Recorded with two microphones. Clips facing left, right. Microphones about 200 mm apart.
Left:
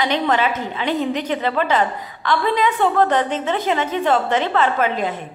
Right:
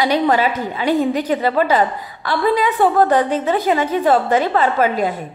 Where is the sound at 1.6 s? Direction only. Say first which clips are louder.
Right 3 dB; 10° right (ahead or behind).